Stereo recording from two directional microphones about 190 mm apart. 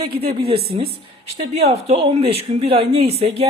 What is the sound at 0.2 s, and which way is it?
Speech, 30° right (ahead or behind).